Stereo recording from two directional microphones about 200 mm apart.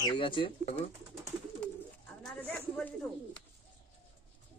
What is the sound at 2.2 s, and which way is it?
Speech, 5° left (ahead or behind).